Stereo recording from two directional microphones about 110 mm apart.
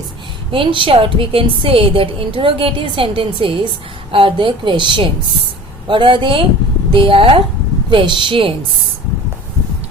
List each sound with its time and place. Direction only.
0.5 s a woman's voice: 50° right (ahead or behind)